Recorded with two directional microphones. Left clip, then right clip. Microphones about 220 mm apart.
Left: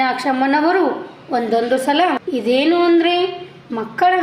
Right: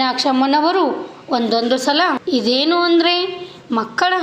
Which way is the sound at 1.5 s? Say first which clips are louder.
Left 1 dB; 40° right (ahead or behind).